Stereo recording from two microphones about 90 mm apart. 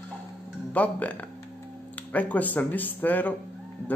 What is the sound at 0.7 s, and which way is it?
Speech, 15° left (ahead or behind).